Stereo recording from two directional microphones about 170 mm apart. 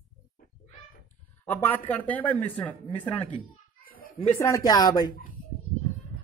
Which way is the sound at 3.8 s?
60° left (ahead or behind).